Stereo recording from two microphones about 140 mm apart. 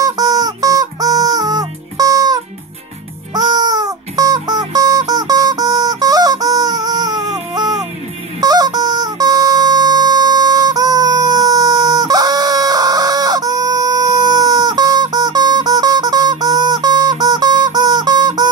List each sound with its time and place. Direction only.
0.0 s music: 25° right (ahead or behind)